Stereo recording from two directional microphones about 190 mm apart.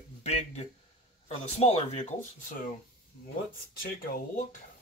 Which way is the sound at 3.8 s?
50° left (ahead or behind).